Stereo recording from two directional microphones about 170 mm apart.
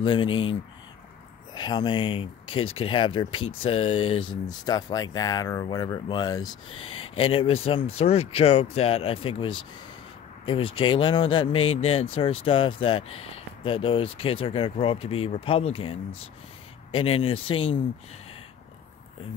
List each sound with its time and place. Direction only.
0.0 s speech: 30° left (ahead or behind)